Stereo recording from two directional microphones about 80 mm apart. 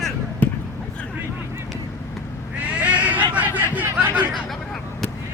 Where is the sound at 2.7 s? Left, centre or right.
Centre.